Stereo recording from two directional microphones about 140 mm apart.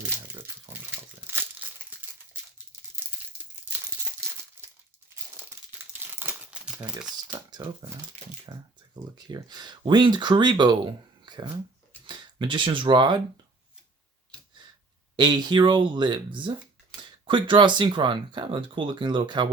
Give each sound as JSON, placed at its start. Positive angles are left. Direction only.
{"t": 0.7, "sound": "crumpling", "side_deg": -15}
{"t": 6.1, "sound": "crumpling", "side_deg": -15}
{"t": 7.6, "sound": "speech", "side_deg": -30}
{"t": 15.1, "sound": "speech", "side_deg": -30}